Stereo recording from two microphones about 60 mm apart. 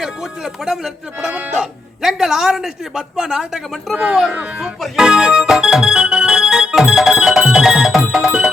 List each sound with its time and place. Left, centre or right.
0.0 s speech: centre
4.3 s speech: centre
4.9 s organ: centre
8.1 s music: centre